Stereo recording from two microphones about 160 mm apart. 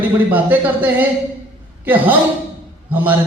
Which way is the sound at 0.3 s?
10° right (ahead or behind).